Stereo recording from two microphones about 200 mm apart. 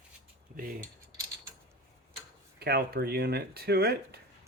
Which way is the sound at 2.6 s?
50° right (ahead or behind).